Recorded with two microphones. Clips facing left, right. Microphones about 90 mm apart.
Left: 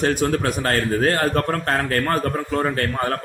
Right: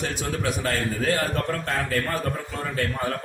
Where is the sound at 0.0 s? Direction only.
55° left (ahead or behind).